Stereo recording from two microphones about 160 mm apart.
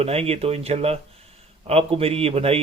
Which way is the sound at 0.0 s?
40° right (ahead or behind).